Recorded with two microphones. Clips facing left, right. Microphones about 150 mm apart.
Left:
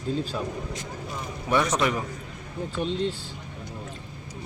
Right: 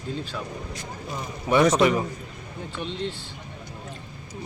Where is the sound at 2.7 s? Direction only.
40° left (ahead or behind).